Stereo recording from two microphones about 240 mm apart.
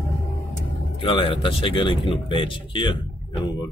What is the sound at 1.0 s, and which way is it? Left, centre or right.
Speech, left.